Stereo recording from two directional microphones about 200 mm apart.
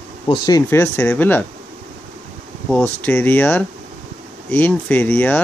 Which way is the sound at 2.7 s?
10° left (ahead or behind).